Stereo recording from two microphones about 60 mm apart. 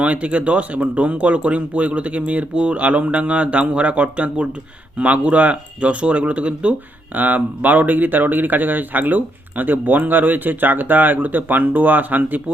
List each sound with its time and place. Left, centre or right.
0.0 s speech: right